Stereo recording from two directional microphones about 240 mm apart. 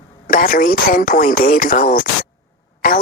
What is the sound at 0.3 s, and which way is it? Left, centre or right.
Speech, left.